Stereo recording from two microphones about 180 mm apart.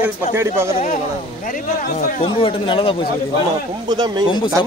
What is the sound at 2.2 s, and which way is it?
Speech, 30° left (ahead or behind).